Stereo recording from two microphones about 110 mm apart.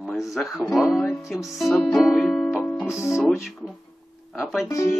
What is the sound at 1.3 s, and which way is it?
Speech, 5° right (ahead or behind).